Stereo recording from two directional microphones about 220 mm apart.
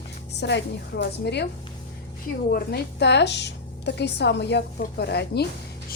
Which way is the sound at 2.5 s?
45° left (ahead or behind).